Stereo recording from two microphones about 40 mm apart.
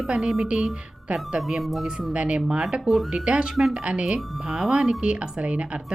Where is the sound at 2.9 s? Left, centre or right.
Centre.